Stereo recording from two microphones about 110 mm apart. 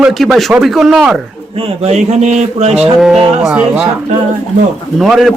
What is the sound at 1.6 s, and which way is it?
Speech, 80° right.